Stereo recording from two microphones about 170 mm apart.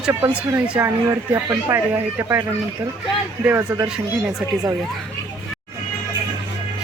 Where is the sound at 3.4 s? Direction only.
15° right (ahead or behind).